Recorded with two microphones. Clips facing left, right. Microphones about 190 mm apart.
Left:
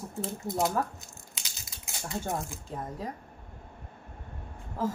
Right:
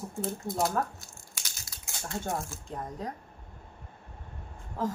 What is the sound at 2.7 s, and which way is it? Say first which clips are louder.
Speech: even; 5° left (ahead or behind).